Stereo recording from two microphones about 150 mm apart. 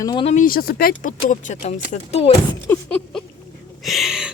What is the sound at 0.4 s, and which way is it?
Speech, 80° left.